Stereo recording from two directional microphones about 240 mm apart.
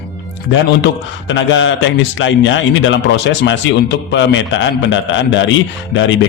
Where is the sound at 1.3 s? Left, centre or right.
Left.